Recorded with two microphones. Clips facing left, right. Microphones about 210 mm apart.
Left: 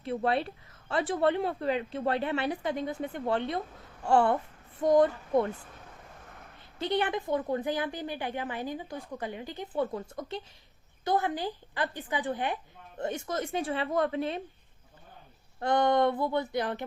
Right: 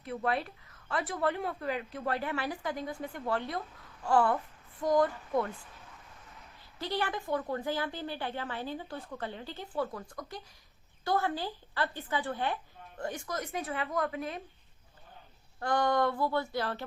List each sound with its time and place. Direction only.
0.0 s a woman's voice: 30° left (ahead or behind)
6.7 s a woman's voice: 20° left (ahead or behind)
15.6 s a woman's voice: 20° left (ahead or behind)